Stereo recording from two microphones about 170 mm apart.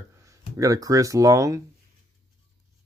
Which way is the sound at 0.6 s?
20° right (ahead or behind).